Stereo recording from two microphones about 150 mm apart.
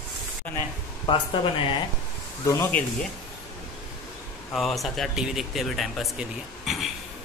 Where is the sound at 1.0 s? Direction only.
35° left (ahead or behind).